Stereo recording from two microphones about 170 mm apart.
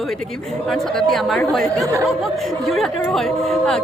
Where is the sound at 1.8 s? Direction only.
20° right (ahead or behind).